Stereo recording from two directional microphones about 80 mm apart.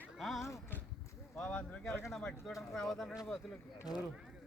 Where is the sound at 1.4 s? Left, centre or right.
Centre.